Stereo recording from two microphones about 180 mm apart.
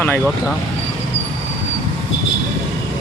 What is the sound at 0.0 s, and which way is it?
Speech, 10° left (ahead or behind).